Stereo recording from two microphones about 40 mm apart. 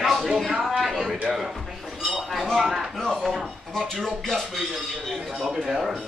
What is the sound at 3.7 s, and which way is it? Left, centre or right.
Speech, centre.